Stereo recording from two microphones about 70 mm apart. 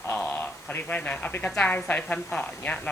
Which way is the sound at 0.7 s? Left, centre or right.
Left.